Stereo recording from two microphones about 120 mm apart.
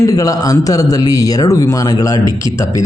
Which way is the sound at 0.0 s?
30° left (ahead or behind).